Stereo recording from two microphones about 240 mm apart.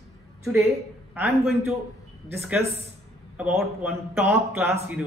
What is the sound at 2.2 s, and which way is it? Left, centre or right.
A man's voice, centre.